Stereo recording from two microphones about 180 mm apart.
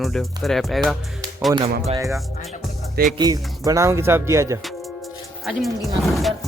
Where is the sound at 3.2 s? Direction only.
20° right (ahead or behind).